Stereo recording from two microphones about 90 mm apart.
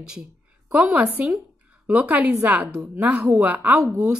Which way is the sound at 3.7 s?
35° right (ahead or behind).